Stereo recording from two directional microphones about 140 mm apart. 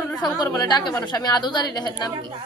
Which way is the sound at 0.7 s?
30° left (ahead or behind).